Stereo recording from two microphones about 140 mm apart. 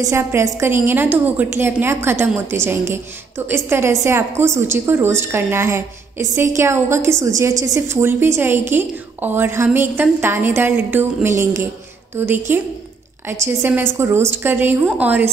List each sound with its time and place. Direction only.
0.0 s a woman's voice: 20° right (ahead or behind)